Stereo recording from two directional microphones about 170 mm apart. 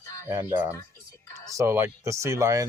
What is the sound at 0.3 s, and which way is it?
Speech, 15° right (ahead or behind).